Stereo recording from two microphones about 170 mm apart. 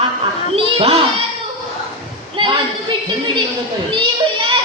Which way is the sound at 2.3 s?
30° right (ahead or behind).